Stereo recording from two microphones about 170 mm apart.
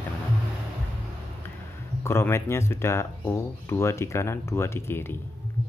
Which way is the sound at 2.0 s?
15° left (ahead or behind).